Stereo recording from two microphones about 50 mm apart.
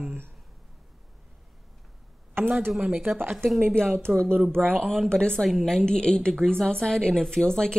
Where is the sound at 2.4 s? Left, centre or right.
Right.